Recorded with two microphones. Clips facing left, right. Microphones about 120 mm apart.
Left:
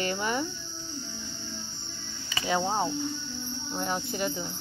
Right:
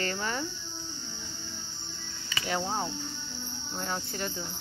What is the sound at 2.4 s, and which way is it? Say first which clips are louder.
Speech: left 4 dB; 20° left (ahead or behind).